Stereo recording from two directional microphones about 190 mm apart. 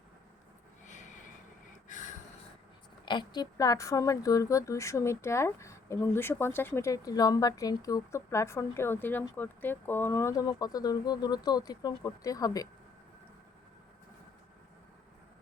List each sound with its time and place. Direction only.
0.9 s snort: 40° left (ahead or behind)
1.9 s gasp: 40° left (ahead or behind)
3.1 s speech: 25° left (ahead or behind)